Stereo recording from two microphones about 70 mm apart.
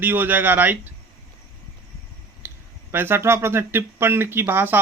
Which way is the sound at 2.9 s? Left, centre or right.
Right.